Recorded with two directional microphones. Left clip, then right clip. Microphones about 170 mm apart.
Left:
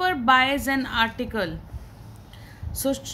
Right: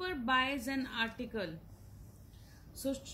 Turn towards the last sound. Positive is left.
turn(degrees=40)  # may be behind; listen again after turning